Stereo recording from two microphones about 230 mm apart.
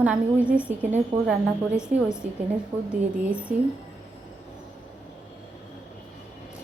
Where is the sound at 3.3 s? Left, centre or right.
Centre.